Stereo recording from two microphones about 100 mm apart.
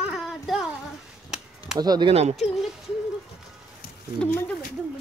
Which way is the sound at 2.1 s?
90° right.